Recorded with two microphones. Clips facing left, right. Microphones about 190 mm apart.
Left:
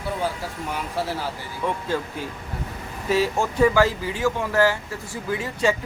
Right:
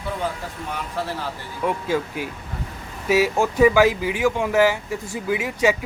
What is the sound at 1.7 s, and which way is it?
Speech, 10° right (ahead or behind).